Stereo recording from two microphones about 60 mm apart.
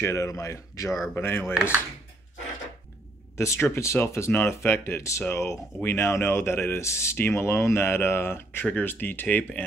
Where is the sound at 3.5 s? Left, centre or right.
Left.